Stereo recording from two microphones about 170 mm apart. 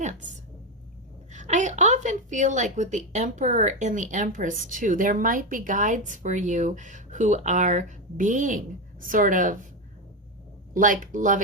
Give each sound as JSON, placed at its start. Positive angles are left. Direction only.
{"t": 0.0, "sound": "speech", "side_deg": -45}
{"t": 1.3, "sound": "a woman's voice", "side_deg": -45}
{"t": 10.8, "sound": "a woman's voice", "side_deg": -50}